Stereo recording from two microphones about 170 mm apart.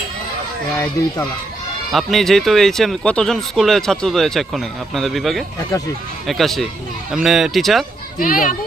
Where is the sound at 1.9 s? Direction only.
Centre (ahead or behind).